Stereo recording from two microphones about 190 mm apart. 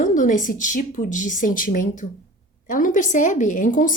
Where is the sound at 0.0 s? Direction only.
45° left (ahead or behind).